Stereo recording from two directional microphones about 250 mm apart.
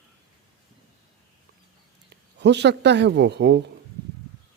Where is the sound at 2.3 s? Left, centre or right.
Right.